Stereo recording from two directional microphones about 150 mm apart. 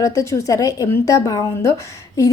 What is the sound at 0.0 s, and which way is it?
A woman's voice, 20° left (ahead or behind).